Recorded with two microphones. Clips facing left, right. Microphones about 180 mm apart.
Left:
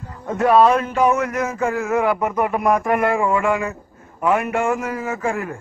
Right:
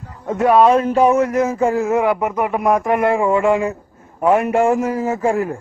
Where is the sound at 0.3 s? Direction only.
15° right (ahead or behind).